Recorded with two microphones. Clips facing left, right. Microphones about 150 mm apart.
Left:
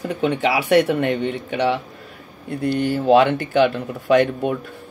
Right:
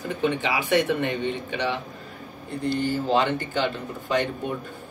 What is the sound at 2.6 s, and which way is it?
Speech, 70° left (ahead or behind).